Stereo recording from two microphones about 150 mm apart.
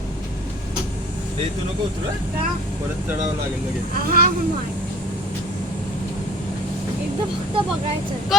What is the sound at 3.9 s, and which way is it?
Speech, 75° right (ahead or behind).